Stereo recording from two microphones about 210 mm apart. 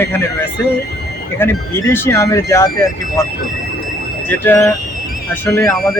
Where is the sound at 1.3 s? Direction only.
10° left (ahead or behind).